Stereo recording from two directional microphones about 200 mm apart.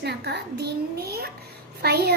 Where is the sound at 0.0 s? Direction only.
55° right (ahead or behind).